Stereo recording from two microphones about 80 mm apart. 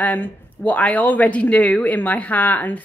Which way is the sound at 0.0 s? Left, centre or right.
Left.